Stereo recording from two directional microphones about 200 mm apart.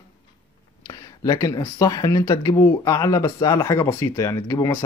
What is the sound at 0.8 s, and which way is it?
Speech, 15° left (ahead or behind).